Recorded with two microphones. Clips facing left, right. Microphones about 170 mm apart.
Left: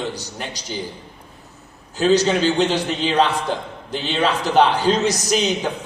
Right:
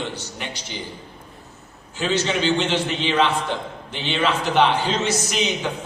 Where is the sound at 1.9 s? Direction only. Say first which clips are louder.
Left 6 dB; 40° left (ahead or behind).